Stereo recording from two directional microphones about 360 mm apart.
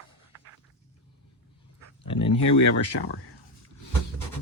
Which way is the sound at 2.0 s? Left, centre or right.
Centre.